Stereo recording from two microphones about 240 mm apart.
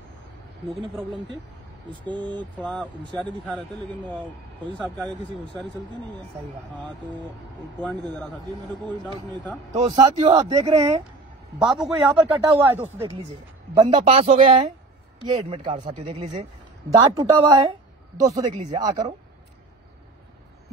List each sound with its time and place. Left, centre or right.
0.7 s speech: right
2.6 s a man's voice: centre
7.8 s a man's voice: centre
9.7 s speech: right
11.6 s a man's voice: centre
13.7 s speech: right